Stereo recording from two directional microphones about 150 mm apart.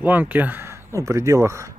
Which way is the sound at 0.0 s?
10° right (ahead or behind).